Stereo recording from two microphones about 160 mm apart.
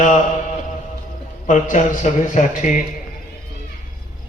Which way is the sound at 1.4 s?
50° left (ahead or behind).